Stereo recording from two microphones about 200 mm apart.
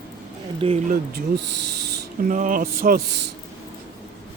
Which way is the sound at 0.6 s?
25° right (ahead or behind).